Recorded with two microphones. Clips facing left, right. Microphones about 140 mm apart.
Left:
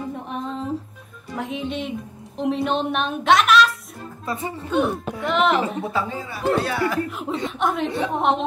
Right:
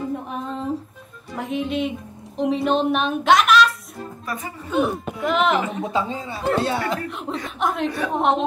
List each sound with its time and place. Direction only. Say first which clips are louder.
0.3 s a sound: right 1 dB; centre (ahead or behind)
1.3 s speech: right 3 dB; centre (ahead or behind)
4.3 s speech: left 4 dB; 25° left (ahead or behind)
4.6 s a woman's voice: even; centre (ahead or behind)
5.8 s a woman's voice: right 1 dB; 20° right (ahead or behind)
7.1 s a woman's voice: left 2 dB; centre (ahead or behind)